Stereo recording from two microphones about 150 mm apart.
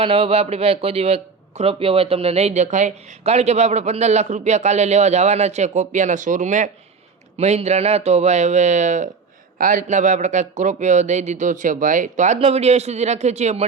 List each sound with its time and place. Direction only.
0.0 s a man's voice: 40° right (ahead or behind)